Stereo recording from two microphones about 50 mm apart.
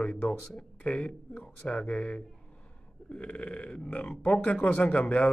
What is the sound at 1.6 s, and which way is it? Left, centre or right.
Speech, centre.